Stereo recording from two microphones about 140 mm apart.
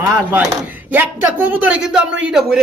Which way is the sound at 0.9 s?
10° right (ahead or behind).